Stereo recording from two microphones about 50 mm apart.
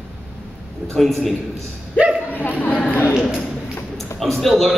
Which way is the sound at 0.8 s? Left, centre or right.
Centre.